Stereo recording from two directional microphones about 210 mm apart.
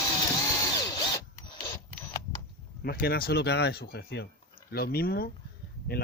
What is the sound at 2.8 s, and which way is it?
Speech, 50° left (ahead or behind).